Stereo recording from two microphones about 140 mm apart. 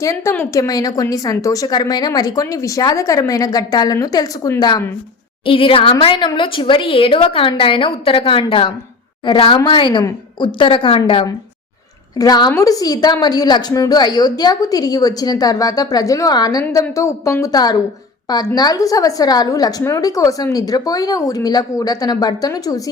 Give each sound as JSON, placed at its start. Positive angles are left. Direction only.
{"t": 0.0, "sound": "a woman's voice", "side_deg": 20}
{"t": 5.5, "sound": "a woman's voice", "side_deg": 40}
{"t": 12.1, "sound": "a woman's voice", "side_deg": 25}